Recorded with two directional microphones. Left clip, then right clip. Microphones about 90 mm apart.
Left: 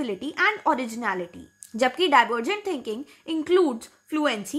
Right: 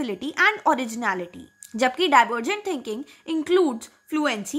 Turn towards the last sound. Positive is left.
turn(degrees=-20)  # may be behind; listen again after turning